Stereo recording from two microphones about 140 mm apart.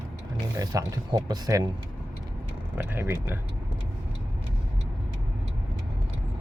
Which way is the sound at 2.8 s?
15° right (ahead or behind).